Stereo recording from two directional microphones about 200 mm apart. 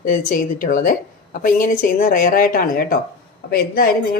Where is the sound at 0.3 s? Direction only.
40° left (ahead or behind).